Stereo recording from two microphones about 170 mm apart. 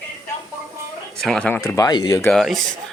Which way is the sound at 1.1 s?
Centre (ahead or behind).